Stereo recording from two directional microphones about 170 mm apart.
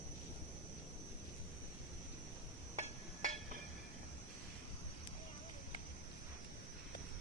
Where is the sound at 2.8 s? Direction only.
45° right (ahead or behind).